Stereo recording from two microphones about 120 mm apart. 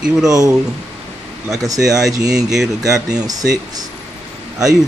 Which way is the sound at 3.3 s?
30° right (ahead or behind).